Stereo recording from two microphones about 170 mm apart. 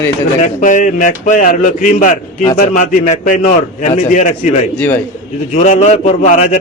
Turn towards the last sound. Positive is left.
turn(degrees=45)  # may be behind; listen again after turning